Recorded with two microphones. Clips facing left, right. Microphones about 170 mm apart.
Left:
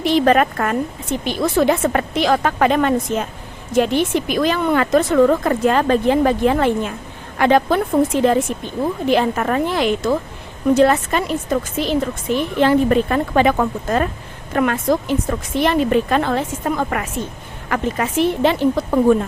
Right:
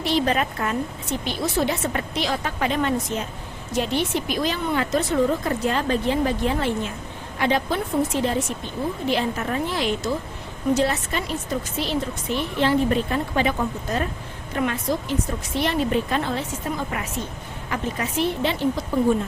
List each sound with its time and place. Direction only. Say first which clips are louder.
0.3 s speech: left 8 dB; 60° left (ahead or behind)
3.7 s speech: left 7 dB; 50° left (ahead or behind)
5.1 s speech: left 7 dB; 70° left (ahead or behind)
13.8 s speech: left 6 dB; 55° left (ahead or behind)
17.7 s a woman's voice: left 7 dB; 70° left (ahead or behind)
18.4 s speech: left 7 dB; 55° left (ahead or behind)